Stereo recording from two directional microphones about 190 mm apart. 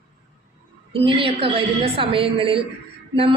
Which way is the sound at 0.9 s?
30° right (ahead or behind).